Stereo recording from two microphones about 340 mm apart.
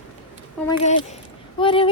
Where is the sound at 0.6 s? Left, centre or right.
Centre.